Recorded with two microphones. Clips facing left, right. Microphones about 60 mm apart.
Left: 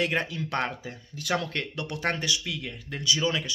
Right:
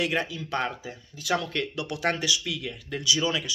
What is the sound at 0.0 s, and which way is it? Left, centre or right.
Speech, left.